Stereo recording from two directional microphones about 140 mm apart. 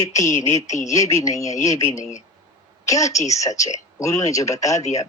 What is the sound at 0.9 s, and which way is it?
Speech, 25° left (ahead or behind).